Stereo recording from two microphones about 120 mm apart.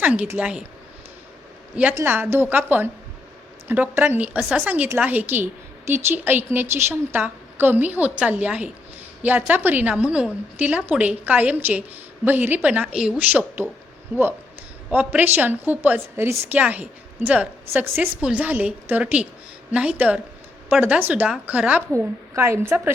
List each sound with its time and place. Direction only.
0.0 s a woman's voice: 10° right (ahead or behind)
1.7 s a woman's voice: 10° right (ahead or behind)
21.9 s a woman's voice: 25° right (ahead or behind)